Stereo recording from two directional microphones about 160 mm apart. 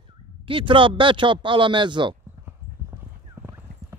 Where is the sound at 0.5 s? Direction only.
35° right (ahead or behind).